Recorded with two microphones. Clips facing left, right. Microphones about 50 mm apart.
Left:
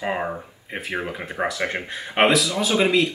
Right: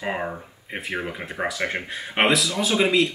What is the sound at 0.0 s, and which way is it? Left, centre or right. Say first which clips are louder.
Speech: left 2 dB; centre.